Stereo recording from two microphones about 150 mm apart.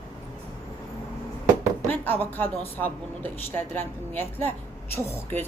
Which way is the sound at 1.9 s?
10° left (ahead or behind).